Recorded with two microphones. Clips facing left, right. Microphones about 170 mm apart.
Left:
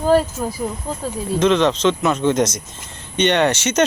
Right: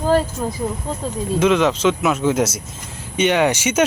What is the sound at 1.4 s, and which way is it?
Speech, 10° right (ahead or behind).